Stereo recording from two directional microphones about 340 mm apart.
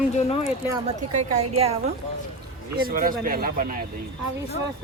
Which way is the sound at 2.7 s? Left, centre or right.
Right.